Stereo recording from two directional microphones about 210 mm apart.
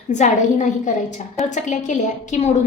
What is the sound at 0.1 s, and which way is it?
A woman's voice, 35° left (ahead or behind).